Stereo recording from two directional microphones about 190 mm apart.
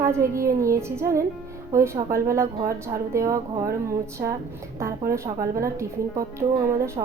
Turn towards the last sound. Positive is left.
turn(degrees=-15)  # may be behind; listen again after turning